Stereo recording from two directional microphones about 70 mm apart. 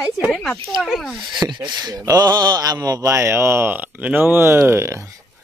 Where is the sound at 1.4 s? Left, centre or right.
Right.